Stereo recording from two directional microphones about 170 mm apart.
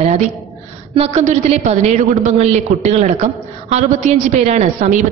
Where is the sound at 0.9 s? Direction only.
40° right (ahead or behind).